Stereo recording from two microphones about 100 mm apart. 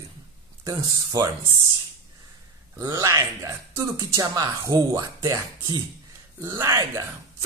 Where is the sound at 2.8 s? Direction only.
30° right (ahead or behind).